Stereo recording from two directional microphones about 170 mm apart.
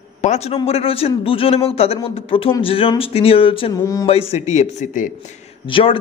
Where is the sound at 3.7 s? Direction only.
20° left (ahead or behind).